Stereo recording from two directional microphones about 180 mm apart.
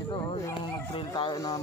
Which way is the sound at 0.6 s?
25° left (ahead or behind).